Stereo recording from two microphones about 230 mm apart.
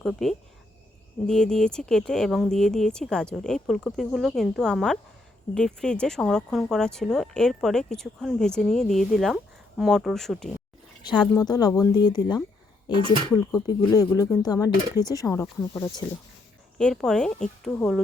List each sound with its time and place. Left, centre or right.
0.0 s speech: centre
11.0 s speech: centre
16.7 s speech: centre